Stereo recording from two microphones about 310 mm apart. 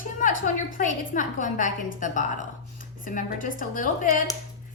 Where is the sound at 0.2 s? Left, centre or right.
Left.